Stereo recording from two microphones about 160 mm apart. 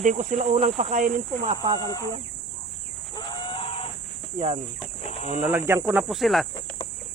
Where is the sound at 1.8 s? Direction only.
20° left (ahead or behind).